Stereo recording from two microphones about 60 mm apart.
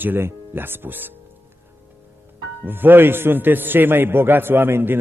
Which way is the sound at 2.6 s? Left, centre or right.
Right.